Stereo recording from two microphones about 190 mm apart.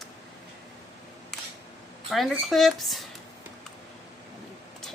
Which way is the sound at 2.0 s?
Centre (ahead or behind).